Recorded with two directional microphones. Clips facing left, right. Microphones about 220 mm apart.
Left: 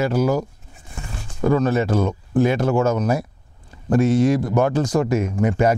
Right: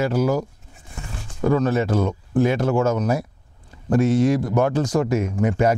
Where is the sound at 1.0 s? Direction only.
25° left (ahead or behind).